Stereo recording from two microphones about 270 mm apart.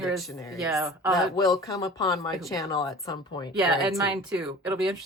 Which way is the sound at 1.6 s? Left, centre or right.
Centre.